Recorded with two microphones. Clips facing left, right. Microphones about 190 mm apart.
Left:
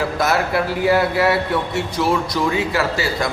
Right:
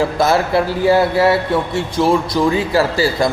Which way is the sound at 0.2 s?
30° right (ahead or behind).